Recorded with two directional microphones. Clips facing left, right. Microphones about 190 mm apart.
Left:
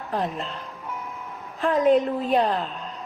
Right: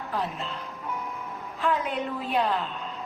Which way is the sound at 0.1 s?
35° left (ahead or behind).